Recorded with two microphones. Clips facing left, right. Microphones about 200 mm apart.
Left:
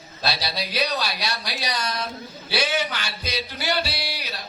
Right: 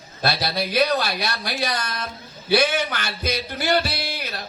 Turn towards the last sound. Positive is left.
turn(degrees=-50)  # may be behind; listen again after turning